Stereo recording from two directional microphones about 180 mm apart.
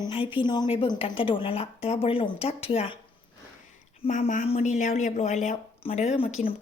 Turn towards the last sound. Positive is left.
turn(degrees=35)  # may be behind; listen again after turning